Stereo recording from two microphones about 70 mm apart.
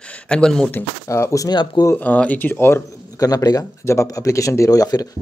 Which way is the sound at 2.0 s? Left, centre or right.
Left.